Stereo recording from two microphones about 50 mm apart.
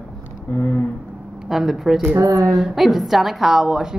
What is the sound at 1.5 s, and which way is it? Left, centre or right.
A woman's voice, centre.